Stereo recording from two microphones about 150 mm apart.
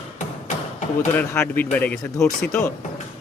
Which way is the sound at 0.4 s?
55° left (ahead or behind).